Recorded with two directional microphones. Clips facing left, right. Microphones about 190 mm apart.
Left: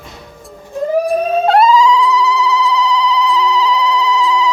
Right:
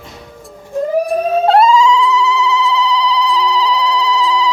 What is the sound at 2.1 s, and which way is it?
Telephone, 25° right (ahead or behind).